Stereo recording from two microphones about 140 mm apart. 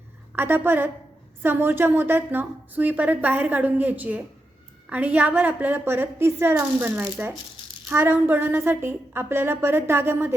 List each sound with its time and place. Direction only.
0.3 s a woman's voice: 15° right (ahead or behind)